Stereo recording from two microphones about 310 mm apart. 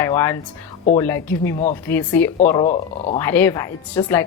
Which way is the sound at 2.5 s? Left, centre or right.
Centre.